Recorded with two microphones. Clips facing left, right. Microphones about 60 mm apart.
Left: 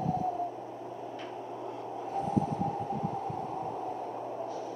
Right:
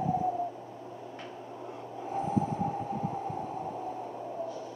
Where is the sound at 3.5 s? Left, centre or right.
Centre.